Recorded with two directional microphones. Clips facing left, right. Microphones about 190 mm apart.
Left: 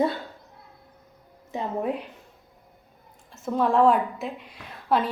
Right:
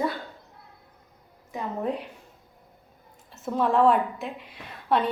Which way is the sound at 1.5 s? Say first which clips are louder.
Left 3 dB; 25° left (ahead or behind).